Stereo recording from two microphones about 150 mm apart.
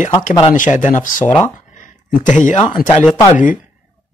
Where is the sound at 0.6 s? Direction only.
60° left (ahead or behind).